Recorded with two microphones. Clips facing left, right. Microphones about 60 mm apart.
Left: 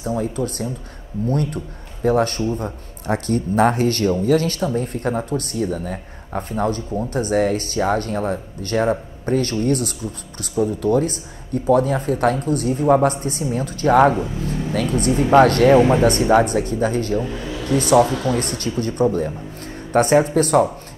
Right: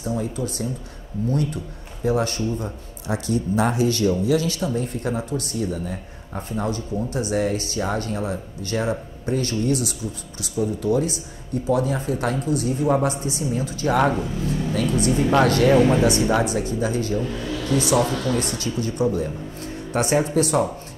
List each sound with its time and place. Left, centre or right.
0.0 s speech: left
14.1 s speech: centre
15.0 s speech: left
15.7 s speech: left
16.0 s speech: left
17.2 s speech: centre
18.4 s speech: left